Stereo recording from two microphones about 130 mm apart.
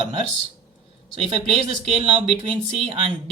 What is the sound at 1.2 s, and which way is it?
Speech, 55° right (ahead or behind).